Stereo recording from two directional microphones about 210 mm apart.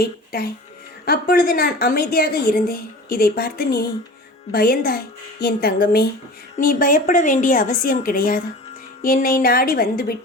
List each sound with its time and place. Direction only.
0.0 s a child's voice: 45° left (ahead or behind)